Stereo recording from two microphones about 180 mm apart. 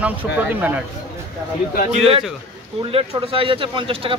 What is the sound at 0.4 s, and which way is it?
Speech, 10° right (ahead or behind).